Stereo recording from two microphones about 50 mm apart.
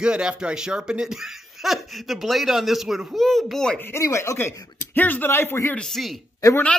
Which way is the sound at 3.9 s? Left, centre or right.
Left.